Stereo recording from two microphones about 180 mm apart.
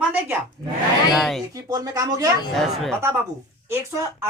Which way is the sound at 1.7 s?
20° right (ahead or behind).